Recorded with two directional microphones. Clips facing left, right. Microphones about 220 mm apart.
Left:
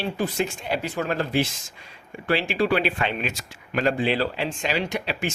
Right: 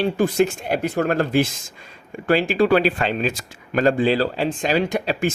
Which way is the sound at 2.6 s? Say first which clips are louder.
Right 5 dB; 45° right (ahead or behind).